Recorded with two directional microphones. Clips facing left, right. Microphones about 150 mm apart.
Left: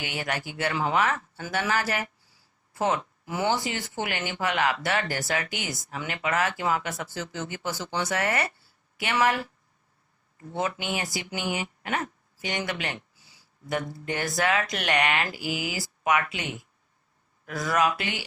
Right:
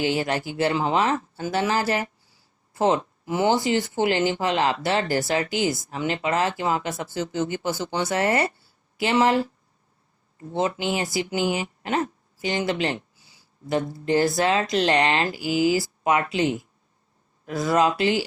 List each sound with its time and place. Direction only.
0.0 s speech: 30° right (ahead or behind)